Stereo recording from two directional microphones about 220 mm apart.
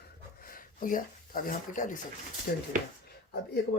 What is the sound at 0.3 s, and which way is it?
Speech, 40° left (ahead or behind).